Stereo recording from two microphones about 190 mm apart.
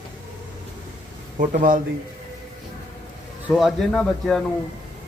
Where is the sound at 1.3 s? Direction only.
45° right (ahead or behind).